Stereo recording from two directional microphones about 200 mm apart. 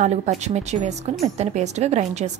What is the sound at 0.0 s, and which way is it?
Speech, 35° right (ahead or behind).